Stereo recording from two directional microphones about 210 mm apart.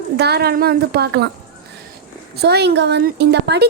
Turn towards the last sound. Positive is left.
turn(degrees=-50)  # may be behind; listen again after turning